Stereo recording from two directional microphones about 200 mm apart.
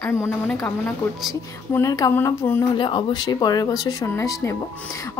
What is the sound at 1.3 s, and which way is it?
A woman's voice, 15° left (ahead or behind).